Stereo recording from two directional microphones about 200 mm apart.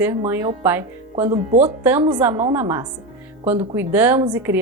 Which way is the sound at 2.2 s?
10° right (ahead or behind).